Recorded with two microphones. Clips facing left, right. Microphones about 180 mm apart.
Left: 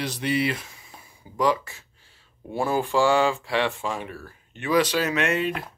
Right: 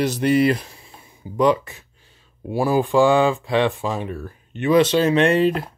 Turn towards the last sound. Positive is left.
turn(degrees=-35)  # may be behind; listen again after turning